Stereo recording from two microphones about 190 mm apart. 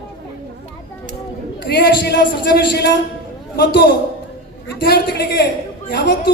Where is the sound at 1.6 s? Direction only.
60° left (ahead or behind).